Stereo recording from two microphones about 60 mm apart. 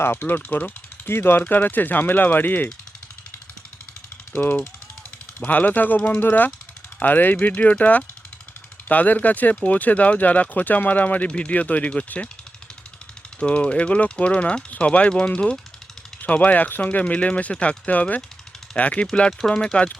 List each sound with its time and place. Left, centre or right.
0.0 s speech: left
4.4 s speech: left
13.4 s speech: left
19.3 s speech: centre